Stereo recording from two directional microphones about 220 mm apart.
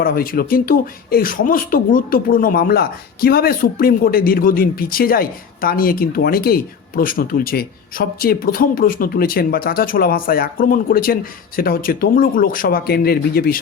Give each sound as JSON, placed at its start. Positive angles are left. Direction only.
{"t": 0.0, "sound": "speech", "side_deg": 40}